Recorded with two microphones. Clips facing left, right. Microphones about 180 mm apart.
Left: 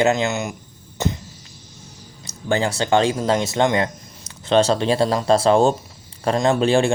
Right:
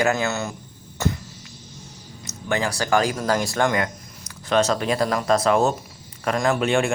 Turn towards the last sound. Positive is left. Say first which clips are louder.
# left 4 dB
turn(degrees=30)  # may be behind; listen again after turning